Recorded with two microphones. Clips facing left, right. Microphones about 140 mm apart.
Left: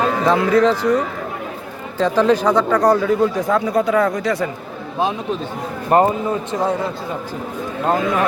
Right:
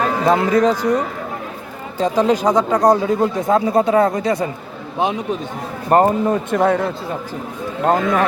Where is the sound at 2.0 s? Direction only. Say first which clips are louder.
Even; 35° right (ahead or behind).